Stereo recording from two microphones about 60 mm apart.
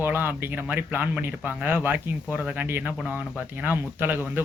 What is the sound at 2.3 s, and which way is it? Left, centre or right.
Speech, right.